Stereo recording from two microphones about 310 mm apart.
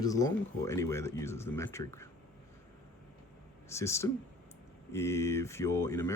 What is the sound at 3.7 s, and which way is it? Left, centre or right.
Speech, centre.